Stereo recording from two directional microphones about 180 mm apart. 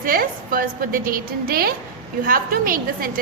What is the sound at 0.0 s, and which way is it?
A woman's voice, 55° right (ahead or behind).